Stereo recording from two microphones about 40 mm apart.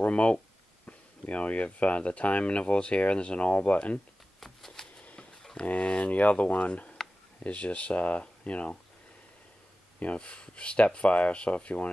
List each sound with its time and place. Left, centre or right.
0.0 s speech: left
4.4 s a sound: centre
5.7 s speech: left
10.1 s speech: left